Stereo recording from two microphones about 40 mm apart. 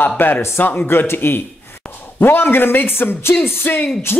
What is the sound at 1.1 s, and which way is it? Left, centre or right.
Speech, left.